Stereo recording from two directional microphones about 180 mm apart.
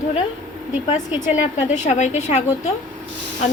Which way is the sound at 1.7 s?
40° left (ahead or behind).